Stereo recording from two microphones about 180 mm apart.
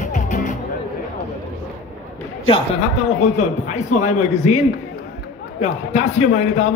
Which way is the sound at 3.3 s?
40° left (ahead or behind).